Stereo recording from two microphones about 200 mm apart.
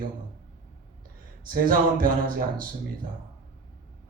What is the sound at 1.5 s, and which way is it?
Speech, 45° right (ahead or behind).